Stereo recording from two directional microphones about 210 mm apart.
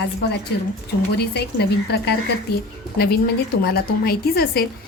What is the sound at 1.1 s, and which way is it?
A woman's voice, 50° left (ahead or behind).